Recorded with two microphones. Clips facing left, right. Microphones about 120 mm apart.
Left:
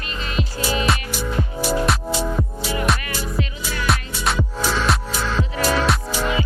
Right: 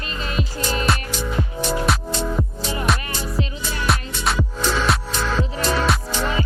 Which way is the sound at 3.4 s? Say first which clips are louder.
Even; 30° right (ahead or behind).